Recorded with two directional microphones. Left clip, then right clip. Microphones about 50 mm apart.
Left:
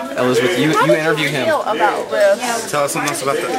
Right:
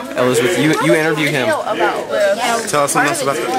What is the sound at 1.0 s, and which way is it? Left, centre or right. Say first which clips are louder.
Speech: right 1 dB; centre.